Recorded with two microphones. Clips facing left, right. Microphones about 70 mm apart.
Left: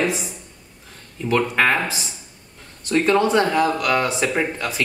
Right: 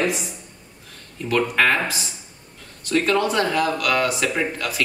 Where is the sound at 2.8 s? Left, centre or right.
Centre.